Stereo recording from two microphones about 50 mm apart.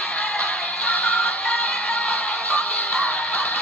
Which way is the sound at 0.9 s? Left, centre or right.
Centre.